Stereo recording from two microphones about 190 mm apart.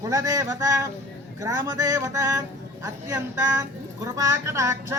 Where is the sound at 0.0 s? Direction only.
15° right (ahead or behind).